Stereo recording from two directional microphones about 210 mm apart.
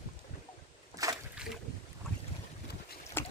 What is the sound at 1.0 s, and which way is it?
Boat, 15° right (ahead or behind).